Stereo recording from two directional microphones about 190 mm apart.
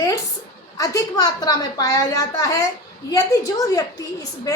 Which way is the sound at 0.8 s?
15° left (ahead or behind).